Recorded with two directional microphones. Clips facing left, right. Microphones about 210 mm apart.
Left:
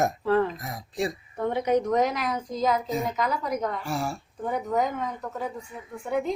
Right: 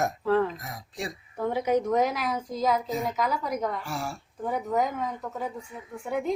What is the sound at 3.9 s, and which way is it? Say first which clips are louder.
Speech: left 4 dB; 25° left (ahead or behind).